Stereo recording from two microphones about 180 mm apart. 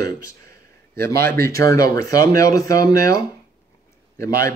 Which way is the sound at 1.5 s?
20° left (ahead or behind).